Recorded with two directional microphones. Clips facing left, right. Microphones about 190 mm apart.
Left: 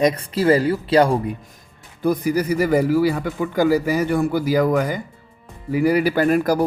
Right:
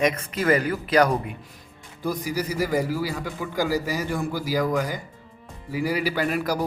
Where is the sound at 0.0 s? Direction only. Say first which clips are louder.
Left 5 dB; 35° left (ahead or behind).